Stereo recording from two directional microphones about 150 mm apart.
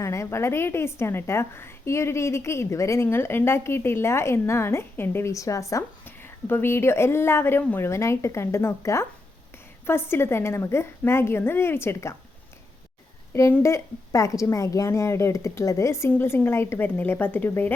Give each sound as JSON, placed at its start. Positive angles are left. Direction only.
{"t": 0.0, "sound": "a woman's voice", "side_deg": 20}
{"t": 13.3, "sound": "a woman's voice", "side_deg": 20}